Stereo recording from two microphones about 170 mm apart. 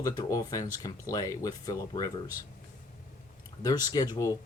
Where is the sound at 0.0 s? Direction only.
20° left (ahead or behind).